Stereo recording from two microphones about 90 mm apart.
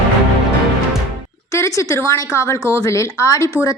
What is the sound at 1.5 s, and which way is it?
A woman's voice, 35° left (ahead or behind).